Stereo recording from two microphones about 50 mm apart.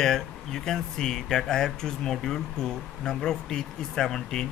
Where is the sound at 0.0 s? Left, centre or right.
Centre.